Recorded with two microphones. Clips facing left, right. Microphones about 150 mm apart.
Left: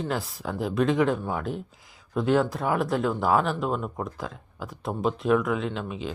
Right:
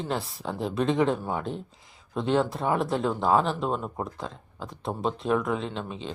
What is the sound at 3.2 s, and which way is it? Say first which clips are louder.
Speech: right 1 dB; 25° right (ahead or behind).